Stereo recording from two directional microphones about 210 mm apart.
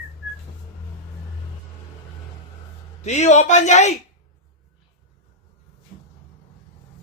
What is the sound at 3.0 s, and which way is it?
Speech, 35° left (ahead or behind).